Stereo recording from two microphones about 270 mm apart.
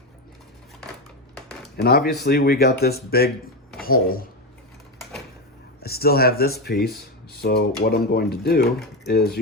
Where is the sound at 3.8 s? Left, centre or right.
Left.